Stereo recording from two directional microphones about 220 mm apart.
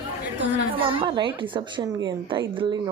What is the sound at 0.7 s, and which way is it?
A woman's voice, 20° right (ahead or behind).